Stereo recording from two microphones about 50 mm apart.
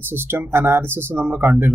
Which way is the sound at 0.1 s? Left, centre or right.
Right.